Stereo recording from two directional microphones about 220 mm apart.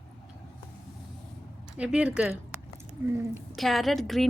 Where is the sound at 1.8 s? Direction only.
5° right (ahead or behind).